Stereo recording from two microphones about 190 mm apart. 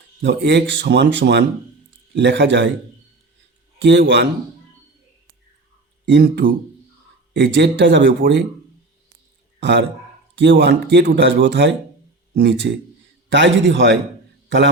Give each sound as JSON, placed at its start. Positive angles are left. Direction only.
{"t": 0.2, "sound": "speech", "side_deg": -65}
{"t": 3.8, "sound": "speech", "side_deg": -70}
{"t": 6.1, "sound": "speech", "side_deg": -65}
{"t": 9.6, "sound": "a man's voice", "side_deg": -65}